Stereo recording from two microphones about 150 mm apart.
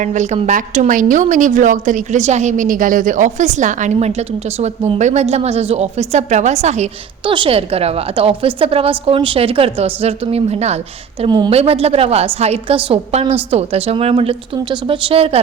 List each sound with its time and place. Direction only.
0.0 s a woman's voice: 55° right (ahead or behind)
7.3 s a woman's voice: 35° right (ahead or behind)
11.3 s a woman's voice: 30° right (ahead or behind)
11.5 s a woman's voice: 40° right (ahead or behind)